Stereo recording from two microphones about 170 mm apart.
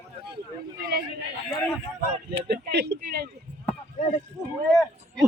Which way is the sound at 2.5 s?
75° right (ahead or behind).